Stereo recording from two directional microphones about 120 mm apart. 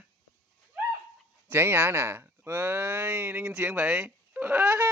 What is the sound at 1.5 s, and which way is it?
Speech, 20° right (ahead or behind).